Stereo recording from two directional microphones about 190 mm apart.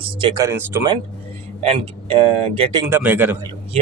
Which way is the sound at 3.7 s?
35° right (ahead or behind).